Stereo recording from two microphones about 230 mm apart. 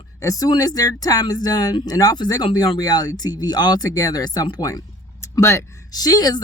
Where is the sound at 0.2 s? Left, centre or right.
Centre.